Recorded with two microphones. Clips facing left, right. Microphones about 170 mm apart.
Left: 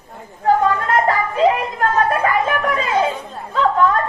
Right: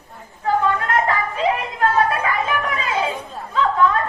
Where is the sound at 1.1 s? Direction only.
45° left (ahead or behind).